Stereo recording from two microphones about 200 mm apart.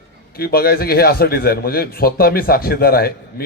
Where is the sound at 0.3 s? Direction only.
50° left (ahead or behind).